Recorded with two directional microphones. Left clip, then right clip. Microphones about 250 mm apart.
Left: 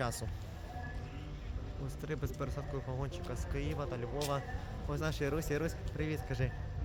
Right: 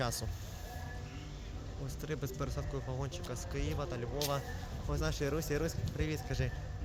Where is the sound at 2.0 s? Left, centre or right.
Centre.